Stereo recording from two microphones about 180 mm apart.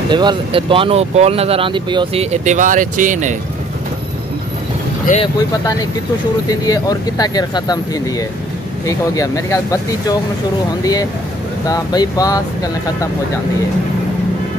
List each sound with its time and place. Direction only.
0.1 s speech: 25° right (ahead or behind)
2.3 s speech: 45° right (ahead or behind)
5.1 s speech: 45° left (ahead or behind)
6.5 s speech: 20° left (ahead or behind)
8.8 s speech: 20° left (ahead or behind)